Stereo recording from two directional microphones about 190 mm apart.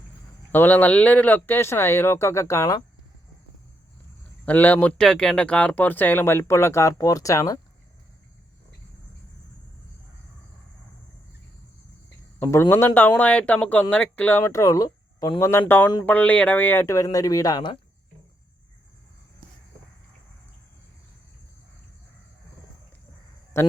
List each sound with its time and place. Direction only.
0.5 s speech: 10° left (ahead or behind)
4.4 s speech: 10° left (ahead or behind)
12.4 s speech: 15° left (ahead or behind)
23.6 s speech: 15° left (ahead or behind)